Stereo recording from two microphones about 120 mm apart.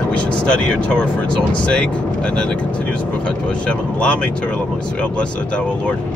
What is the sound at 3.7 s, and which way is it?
Speech, 10° left (ahead or behind).